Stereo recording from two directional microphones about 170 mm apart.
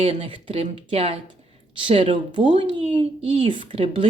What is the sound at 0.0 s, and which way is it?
A woman's voice, 30° right (ahead or behind).